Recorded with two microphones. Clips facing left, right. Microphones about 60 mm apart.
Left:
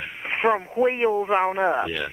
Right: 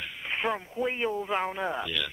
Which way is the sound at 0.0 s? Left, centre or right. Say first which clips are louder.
Left 8 dB; left.